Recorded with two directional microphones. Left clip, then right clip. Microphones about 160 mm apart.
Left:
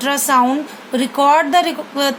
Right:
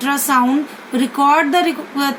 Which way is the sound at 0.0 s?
30° left (ahead or behind).